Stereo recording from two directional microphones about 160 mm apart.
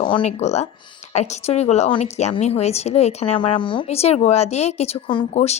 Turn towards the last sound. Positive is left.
turn(degrees=35)  # may be behind; listen again after turning